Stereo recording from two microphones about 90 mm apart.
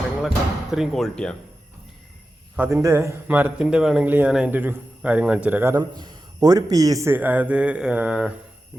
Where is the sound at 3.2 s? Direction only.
20° right (ahead or behind).